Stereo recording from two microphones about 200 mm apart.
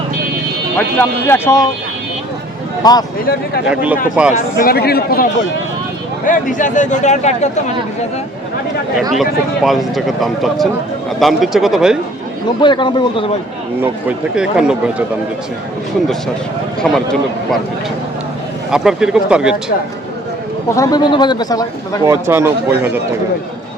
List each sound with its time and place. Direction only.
0.8 s speech: 10° left (ahead or behind)
2.8 s speech: 20° left (ahead or behind)
3.7 s speech: 5° right (ahead or behind)
4.3 s speech: 45° left (ahead or behind)
9.6 s speech: centre (ahead or behind)
12.6 s speech: 25° left (ahead or behind)
14.3 s speech: 5° right (ahead or behind)
16.8 s speech: 5° left (ahead or behind)
18.7 s speech: 5° right (ahead or behind)
20.7 s speech: 15° left (ahead or behind)
22.0 s a man's voice: 10° right (ahead or behind)